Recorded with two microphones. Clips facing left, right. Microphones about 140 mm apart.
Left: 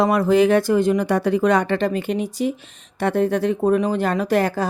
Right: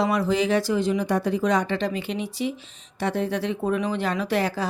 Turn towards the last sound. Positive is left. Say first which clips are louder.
# left 5 dB
turn(degrees=50)  # may be behind; listen again after turning